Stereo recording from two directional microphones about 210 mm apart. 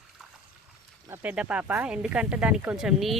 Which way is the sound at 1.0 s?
10° right (ahead or behind).